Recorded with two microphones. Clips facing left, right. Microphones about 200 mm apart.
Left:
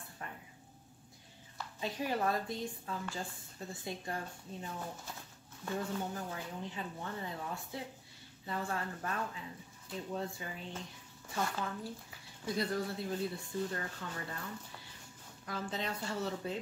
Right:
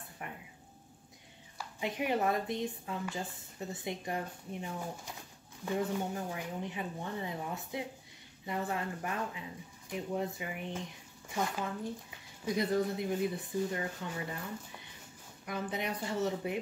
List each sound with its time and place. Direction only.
0.2 s a sound: 15° right (ahead or behind)
1.6 s speech: 20° right (ahead or behind)
12.4 s speech: 20° right (ahead or behind)
15.4 s speech: 20° right (ahead or behind)